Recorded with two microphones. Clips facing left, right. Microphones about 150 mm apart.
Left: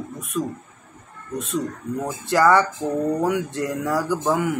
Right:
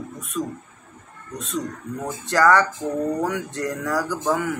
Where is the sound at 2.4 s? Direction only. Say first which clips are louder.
Even; 10° left (ahead or behind).